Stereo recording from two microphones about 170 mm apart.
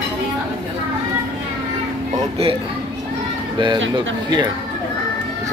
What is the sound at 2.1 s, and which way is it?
Speech, 35° right (ahead or behind).